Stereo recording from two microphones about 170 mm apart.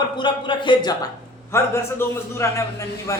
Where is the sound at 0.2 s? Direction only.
25° left (ahead or behind).